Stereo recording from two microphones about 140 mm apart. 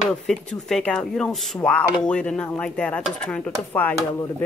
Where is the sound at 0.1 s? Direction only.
5° left (ahead or behind).